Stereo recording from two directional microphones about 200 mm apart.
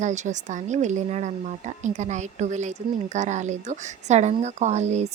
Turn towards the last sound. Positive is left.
turn(degrees=-35)  # may be behind; listen again after turning